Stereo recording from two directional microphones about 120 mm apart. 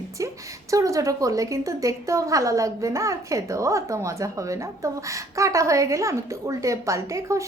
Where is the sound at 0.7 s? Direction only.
25° right (ahead or behind).